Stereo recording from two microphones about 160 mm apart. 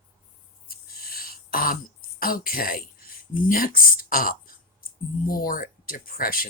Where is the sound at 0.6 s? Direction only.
70° left (ahead or behind).